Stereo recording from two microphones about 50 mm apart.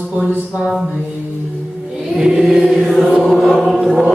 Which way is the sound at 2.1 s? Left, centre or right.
Centre.